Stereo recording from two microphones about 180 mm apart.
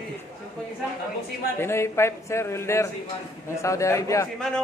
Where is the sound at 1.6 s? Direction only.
15° left (ahead or behind).